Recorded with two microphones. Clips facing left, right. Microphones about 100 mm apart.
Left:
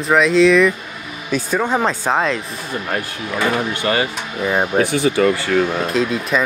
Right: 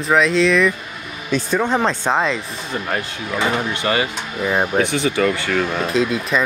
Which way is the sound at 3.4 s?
25° right (ahead or behind).